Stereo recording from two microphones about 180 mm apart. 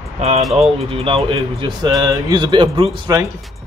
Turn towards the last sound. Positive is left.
turn(degrees=-20)  # may be behind; listen again after turning